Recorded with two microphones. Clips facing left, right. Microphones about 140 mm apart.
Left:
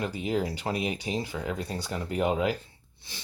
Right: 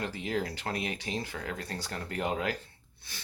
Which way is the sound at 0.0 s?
15° left (ahead or behind).